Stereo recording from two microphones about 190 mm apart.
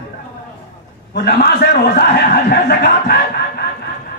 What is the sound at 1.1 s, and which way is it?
Speech, 60° left (ahead or behind).